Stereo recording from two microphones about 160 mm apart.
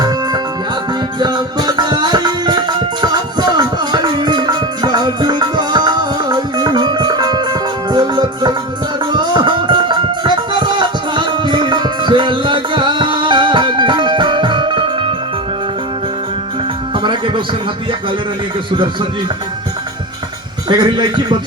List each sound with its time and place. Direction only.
1.2 s music: 25° right (ahead or behind)
16.9 s music: 30° right (ahead or behind)
20.7 s a man's voice: 30° right (ahead or behind)